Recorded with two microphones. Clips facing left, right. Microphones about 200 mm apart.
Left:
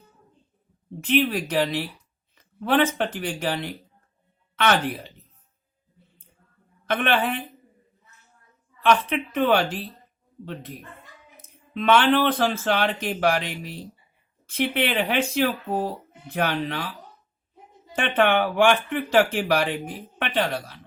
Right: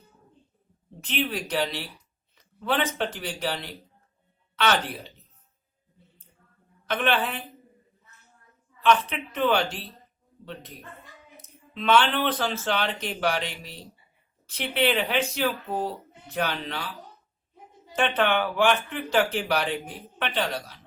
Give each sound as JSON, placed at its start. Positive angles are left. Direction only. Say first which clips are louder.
{"t": 1.0, "sound": "speech", "louder": "left 7 dB", "side_deg": 55}
{"t": 6.8, "sound": "speech", "louder": "left 3 dB", "side_deg": 50}
{"t": 8.8, "sound": "speech", "louder": "left 2 dB", "side_deg": 55}
{"t": 11.4, "sound": "speech", "louder": "left 4 dB", "side_deg": 50}
{"t": 17.9, "sound": "speech", "louder": "left 3 dB", "side_deg": 50}